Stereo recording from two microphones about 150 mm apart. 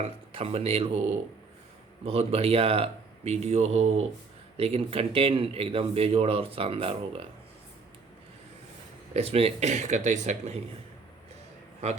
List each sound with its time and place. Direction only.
0.0 s speech: 40° right (ahead or behind)
9.1 s speech: 40° right (ahead or behind)